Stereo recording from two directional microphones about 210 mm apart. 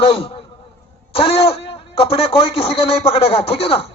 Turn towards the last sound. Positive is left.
turn(degrees=25)  # may be behind; listen again after turning